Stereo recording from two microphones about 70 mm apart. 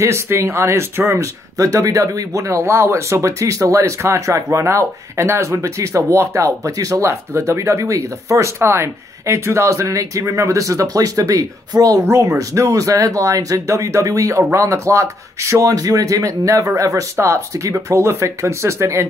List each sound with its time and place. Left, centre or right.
0.0 s speech: right